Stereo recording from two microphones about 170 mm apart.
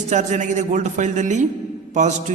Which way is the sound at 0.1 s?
45° right (ahead or behind).